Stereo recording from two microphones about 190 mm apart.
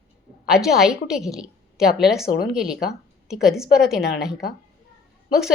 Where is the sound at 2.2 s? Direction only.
55° left (ahead or behind).